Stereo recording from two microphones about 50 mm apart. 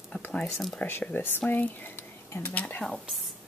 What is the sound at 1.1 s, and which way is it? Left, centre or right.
Speech, left.